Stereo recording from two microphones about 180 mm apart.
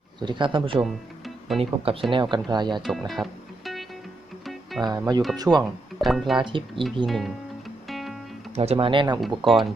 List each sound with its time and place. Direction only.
0.2 s speech: 25° right (ahead or behind)
0.8 s music: centre (ahead or behind)
1.5 s speech: 30° right (ahead or behind)
3.1 s music: centre (ahead or behind)
4.8 s speech: 20° right (ahead or behind)
6.0 s speech: centre (ahead or behind)
6.3 s speech: 25° right (ahead or behind)
7.1 s speech: centre (ahead or behind)
7.9 s music: centre (ahead or behind)
8.5 s speech: 35° right (ahead or behind)